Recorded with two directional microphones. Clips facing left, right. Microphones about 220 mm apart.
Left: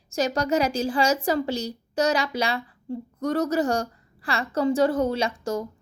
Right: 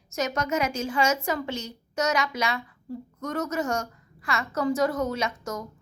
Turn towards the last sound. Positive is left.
turn(degrees=30)  # may be behind; listen again after turning